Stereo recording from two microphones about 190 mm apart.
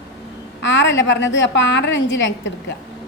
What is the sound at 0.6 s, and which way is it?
A woman's voice, 70° left (ahead or behind).